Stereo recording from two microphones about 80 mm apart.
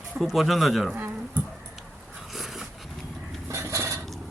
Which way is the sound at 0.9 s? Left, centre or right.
Right.